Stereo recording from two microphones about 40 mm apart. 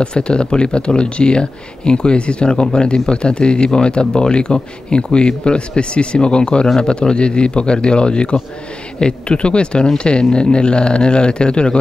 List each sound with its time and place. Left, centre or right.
0.0 s speech: left